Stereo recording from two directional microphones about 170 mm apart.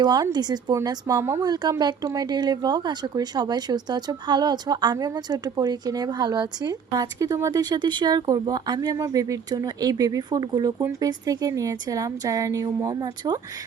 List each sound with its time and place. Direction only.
0.0 s speech: 25° right (ahead or behind)